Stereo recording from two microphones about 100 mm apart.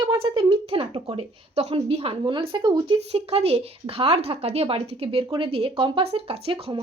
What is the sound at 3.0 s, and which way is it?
Speech, 90° right.